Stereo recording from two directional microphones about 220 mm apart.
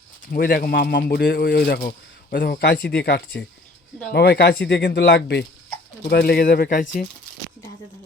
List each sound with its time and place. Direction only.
0.3 s speech: 40° left (ahead or behind)